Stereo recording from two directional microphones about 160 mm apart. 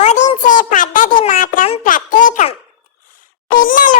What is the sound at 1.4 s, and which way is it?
Music, 60° left (ahead or behind).